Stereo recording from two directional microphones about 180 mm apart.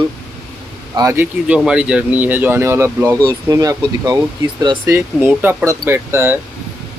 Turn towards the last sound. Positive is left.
turn(degrees=-15)  # may be behind; listen again after turning